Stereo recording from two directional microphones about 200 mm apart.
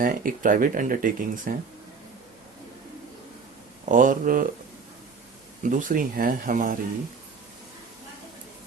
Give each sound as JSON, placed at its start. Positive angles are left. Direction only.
{"t": 0.0, "sound": "speech", "side_deg": -45}
{"t": 3.8, "sound": "speech", "side_deg": -40}
{"t": 5.6, "sound": "speech", "side_deg": -40}